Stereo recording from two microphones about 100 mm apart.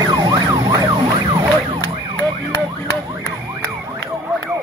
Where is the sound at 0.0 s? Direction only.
45° right (ahead or behind).